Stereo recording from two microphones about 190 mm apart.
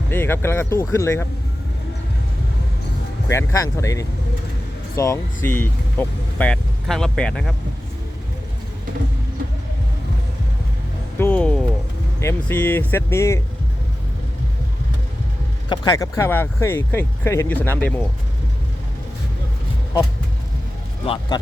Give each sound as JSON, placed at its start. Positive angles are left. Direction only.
{"t": 0.1, "sound": "speech", "side_deg": 10}
{"t": 3.2, "sound": "speech", "side_deg": 15}
{"t": 11.2, "sound": "a sound", "side_deg": 10}
{"t": 12.2, "sound": "speech", "side_deg": 10}
{"t": 15.7, "sound": "speech", "side_deg": 20}
{"t": 21.0, "sound": "speech", "side_deg": 30}